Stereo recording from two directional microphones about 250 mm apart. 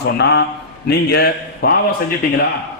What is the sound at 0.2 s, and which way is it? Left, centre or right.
A man's voice, left.